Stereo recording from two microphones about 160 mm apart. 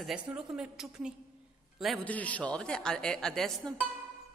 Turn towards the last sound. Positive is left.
turn(degrees=5)  # may be behind; listen again after turning